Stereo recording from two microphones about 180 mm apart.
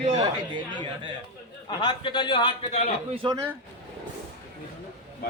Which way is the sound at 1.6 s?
25° left (ahead or behind).